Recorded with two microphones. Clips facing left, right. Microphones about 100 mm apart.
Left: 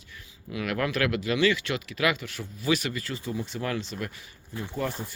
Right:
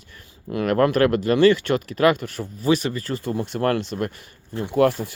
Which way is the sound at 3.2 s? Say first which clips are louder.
Right 10 dB; 55° right (ahead or behind).